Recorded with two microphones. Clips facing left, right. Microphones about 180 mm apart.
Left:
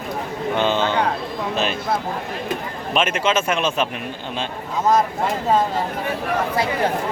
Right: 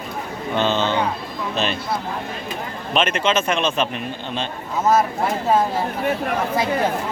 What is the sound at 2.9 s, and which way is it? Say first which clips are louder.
Speech: even; 5° left (ahead or behind).